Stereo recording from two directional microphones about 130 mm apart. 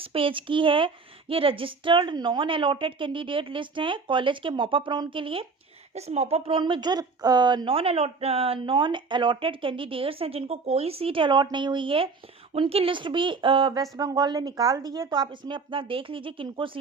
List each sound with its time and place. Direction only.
0.0 s a woman's voice: 45° right (ahead or behind)
5.9 s a woman's voice: 55° right (ahead or behind)
13.9 s a woman's voice: 30° right (ahead or behind)